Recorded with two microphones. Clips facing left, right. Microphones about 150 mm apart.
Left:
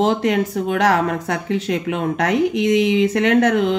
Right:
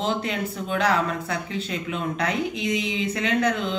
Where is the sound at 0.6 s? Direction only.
70° left (ahead or behind).